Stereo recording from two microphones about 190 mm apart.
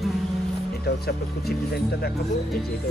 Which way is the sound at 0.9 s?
55° left (ahead or behind).